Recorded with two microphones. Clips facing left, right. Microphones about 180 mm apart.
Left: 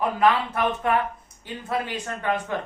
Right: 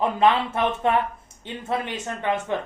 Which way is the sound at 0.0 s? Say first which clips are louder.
Right 1 dB; 25° right (ahead or behind).